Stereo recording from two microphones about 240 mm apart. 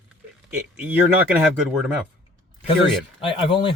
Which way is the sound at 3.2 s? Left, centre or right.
Centre.